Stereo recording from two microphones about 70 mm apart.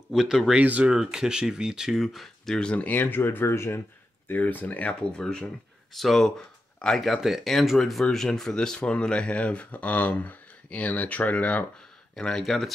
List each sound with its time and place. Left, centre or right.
0.1 s speech: centre
0.6 s speech: centre; by 3.8 s left
4.3 s speech: left
5.2 s speech: centre
12.2 s speech: centre